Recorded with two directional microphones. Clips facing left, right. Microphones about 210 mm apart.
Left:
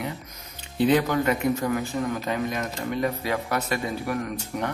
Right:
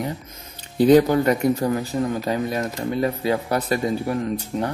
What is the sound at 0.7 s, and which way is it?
Speech, 40° right (ahead or behind).